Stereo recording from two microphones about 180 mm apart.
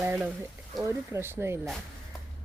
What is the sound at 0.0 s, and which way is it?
Speech, 10° right (ahead or behind).